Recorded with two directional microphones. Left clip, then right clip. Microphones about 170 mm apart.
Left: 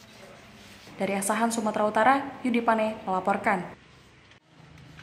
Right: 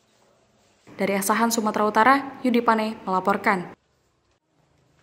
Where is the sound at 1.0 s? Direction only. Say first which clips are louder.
Right 5 dB; 20° right (ahead or behind).